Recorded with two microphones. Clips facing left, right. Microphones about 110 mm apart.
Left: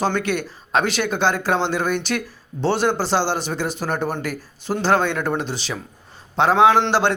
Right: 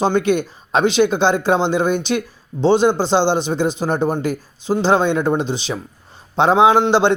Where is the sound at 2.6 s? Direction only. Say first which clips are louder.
Right 6 dB; 20° right (ahead or behind).